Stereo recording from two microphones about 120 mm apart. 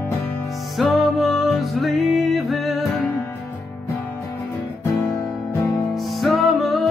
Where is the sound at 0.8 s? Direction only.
Centre (ahead or behind).